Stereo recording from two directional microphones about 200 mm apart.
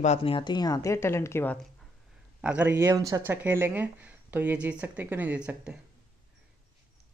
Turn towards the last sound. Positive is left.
turn(degrees=-5)  # may be behind; listen again after turning